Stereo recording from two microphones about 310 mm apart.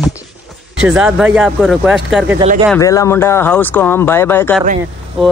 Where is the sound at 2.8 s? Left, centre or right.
Centre.